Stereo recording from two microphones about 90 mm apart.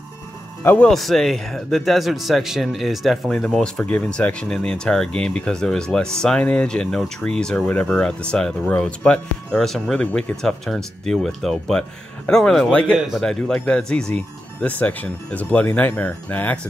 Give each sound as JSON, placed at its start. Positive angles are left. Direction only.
{"t": 0.7, "sound": "speech", "side_deg": 5}
{"t": 13.2, "sound": "speech", "side_deg": 5}